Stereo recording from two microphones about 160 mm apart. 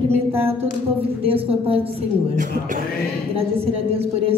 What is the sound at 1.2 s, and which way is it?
Speech, 35° right (ahead or behind).